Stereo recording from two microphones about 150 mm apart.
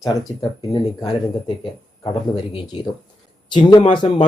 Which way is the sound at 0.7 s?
30° left (ahead or behind).